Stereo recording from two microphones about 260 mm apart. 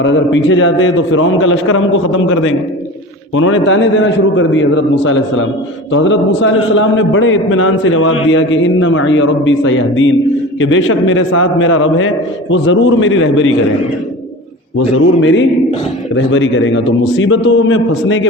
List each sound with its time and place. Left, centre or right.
0.0 s a man's voice: left
14.8 s a man's voice: left